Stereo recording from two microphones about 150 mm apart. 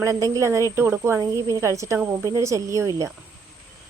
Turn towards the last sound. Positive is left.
turn(degrees=-20)  # may be behind; listen again after turning